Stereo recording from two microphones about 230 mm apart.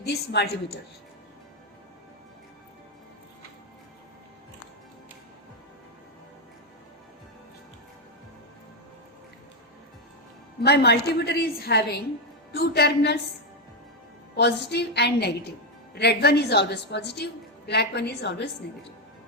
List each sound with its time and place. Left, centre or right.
0.0 s a woman's voice: left
10.6 s a woman's voice: left
14.3 s a woman's voice: left